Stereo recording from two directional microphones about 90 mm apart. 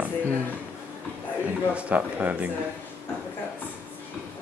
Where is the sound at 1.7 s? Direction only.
15° right (ahead or behind).